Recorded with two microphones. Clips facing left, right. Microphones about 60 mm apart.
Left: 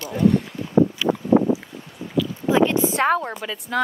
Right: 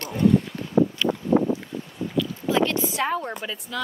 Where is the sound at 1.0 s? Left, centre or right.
Centre.